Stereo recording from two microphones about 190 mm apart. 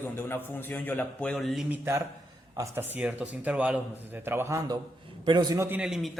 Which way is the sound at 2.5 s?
15° right (ahead or behind).